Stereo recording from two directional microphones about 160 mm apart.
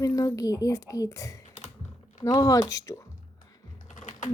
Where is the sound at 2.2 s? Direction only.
20° left (ahead or behind).